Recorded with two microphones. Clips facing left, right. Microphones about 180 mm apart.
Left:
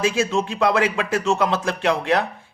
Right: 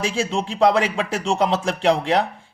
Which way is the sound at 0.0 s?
30° right (ahead or behind).